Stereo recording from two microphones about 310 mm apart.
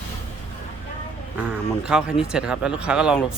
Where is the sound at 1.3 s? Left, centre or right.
Centre.